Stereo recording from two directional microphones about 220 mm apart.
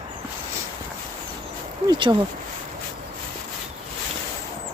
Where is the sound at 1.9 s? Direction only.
20° right (ahead or behind).